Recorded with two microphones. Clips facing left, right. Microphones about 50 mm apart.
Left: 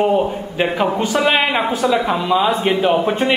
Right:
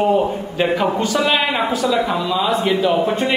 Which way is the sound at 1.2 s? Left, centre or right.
Left.